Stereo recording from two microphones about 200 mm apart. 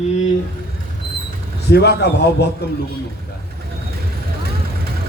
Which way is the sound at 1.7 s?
55° left (ahead or behind).